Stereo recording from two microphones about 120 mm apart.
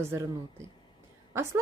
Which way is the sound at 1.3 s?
20° right (ahead or behind).